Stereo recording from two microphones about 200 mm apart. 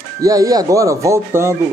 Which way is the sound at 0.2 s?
15° right (ahead or behind).